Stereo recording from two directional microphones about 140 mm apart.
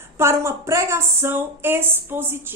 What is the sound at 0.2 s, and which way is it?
A woman's voice, 20° right (ahead or behind).